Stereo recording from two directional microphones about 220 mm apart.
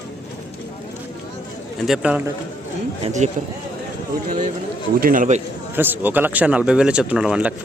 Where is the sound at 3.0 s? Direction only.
30° right (ahead or behind).